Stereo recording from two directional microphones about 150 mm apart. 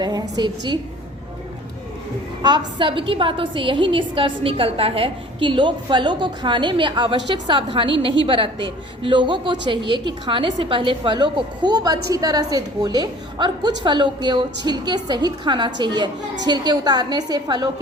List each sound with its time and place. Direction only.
0.0 s a woman's voice: 25° right (ahead or behind)
2.4 s a woman's voice: 30° right (ahead or behind)